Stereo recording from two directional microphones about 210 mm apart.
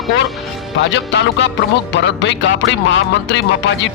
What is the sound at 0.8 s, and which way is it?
A man's voice, 60° left (ahead or behind).